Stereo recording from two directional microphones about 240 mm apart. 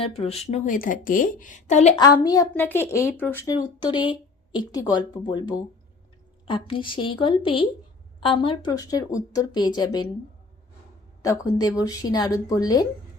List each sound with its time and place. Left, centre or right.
0.0 s a woman's voice: left
2.2 s a woman's voice: centre
11.2 s a woman's voice: centre